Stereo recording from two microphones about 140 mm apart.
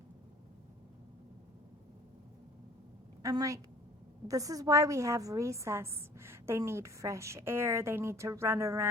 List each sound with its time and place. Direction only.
3.2 s a woman's voice: 25° right (ahead or behind)